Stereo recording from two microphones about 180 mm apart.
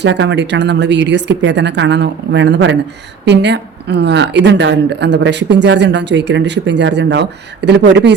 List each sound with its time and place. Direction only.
0.0 s a woman's voice: 80° right
3.2 s a woman's voice: 75° right (ahead or behind)